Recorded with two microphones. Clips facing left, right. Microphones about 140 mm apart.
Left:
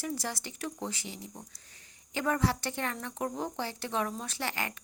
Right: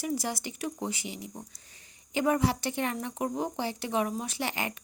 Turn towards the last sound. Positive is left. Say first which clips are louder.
# right 3 dB
turn(degrees=-15)  # may be behind; listen again after turning